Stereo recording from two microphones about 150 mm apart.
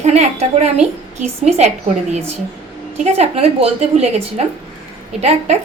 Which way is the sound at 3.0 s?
45° right (ahead or behind).